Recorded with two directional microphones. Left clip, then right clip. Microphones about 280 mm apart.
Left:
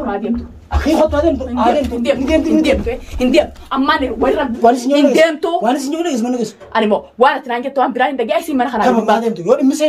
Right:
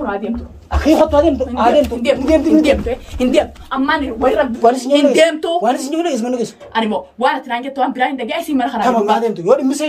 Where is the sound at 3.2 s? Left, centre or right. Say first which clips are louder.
Left 1 dB; right.